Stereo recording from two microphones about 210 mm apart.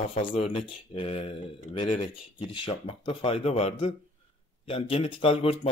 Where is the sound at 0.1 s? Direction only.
30° left (ahead or behind).